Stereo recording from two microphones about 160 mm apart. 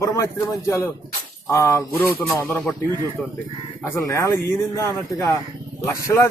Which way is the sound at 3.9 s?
20° left (ahead or behind).